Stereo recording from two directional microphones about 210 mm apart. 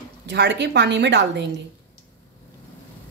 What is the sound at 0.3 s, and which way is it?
A woman's voice, 55° right (ahead or behind).